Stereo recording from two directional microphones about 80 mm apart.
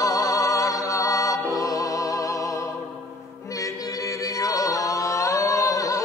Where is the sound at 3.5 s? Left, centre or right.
Left.